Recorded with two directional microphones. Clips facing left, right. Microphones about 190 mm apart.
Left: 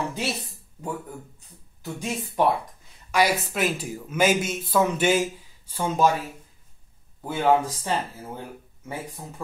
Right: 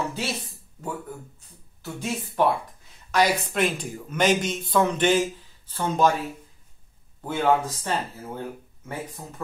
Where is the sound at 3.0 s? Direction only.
5° left (ahead or behind).